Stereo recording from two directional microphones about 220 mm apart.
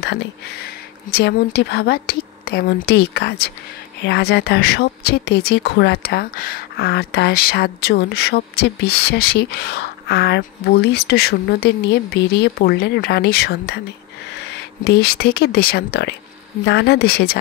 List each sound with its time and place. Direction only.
0.0 s speech: 50° left (ahead or behind)